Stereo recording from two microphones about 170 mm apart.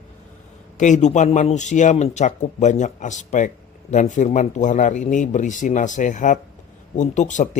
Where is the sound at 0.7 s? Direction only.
45° left (ahead or behind).